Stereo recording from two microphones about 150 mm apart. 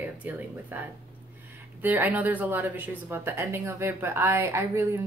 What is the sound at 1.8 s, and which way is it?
A woman's voice, 10° right (ahead or behind).